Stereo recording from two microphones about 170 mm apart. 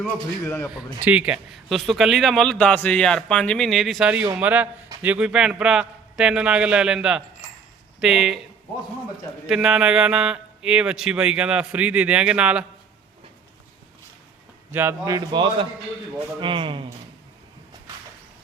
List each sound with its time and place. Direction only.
0.0 s a man's voice: 15° left (ahead or behind)
1.0 s a man's voice: 5° right (ahead or behind)
9.5 s a man's voice: 5° right (ahead or behind)
14.7 s a man's voice: 15° right (ahead or behind); by 16.8 s 30° right (ahead or behind)